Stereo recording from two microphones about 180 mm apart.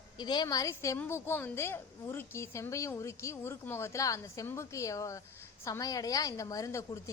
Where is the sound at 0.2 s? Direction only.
25° left (ahead or behind).